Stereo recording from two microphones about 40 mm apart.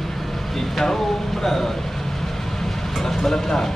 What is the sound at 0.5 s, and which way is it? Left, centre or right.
Vehicle, centre.